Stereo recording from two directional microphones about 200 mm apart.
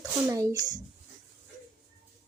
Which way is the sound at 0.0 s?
15° right (ahead or behind).